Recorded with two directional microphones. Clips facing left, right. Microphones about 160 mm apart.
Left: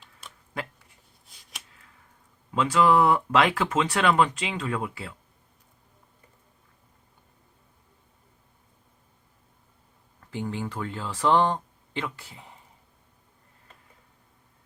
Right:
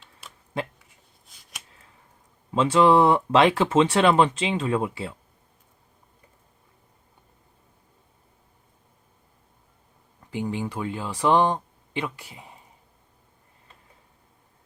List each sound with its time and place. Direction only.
0.5 s speech: 25° right (ahead or behind)
0.9 s finger snapping: centre (ahead or behind)
2.5 s speech: 25° right (ahead or behind)
10.2 s speech: 15° right (ahead or behind)